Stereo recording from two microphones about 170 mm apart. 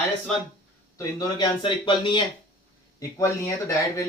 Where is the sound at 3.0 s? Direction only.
15° left (ahead or behind).